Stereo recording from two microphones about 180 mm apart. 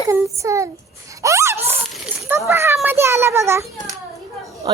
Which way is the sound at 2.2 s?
15° right (ahead or behind).